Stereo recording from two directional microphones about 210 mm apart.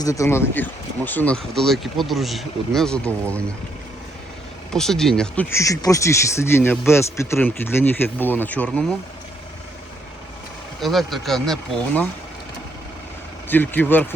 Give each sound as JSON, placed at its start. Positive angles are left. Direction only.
{"t": 0.0, "sound": "speech", "side_deg": 15}
{"t": 4.7, "sound": "speech", "side_deg": 0}
{"t": 10.8, "sound": "speech", "side_deg": 0}
{"t": 13.5, "sound": "speech", "side_deg": 10}